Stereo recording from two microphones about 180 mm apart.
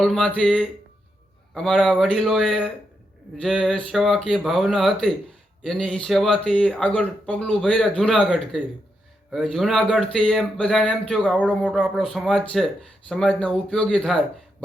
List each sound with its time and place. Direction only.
0.0 s speech: 5° left (ahead or behind)